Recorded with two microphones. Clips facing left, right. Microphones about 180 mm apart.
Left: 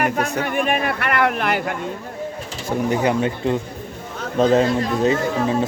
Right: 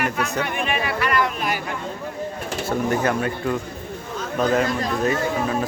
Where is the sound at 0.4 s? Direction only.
45° left (ahead or behind); by 1.7 s 60° left (ahead or behind).